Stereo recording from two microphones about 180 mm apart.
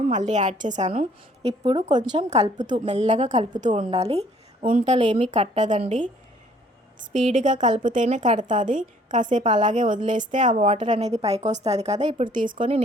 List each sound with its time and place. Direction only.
0.0 s a woman's voice: 45° right (ahead or behind)
10.6 s a woman's voice: 30° right (ahead or behind)
12.5 s speech: 30° right (ahead or behind)